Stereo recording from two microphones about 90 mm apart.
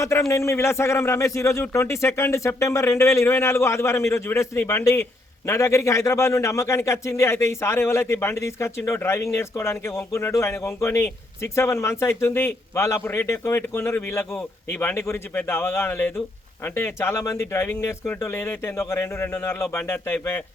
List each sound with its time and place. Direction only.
0.0 s a man's voice: 35° left (ahead or behind)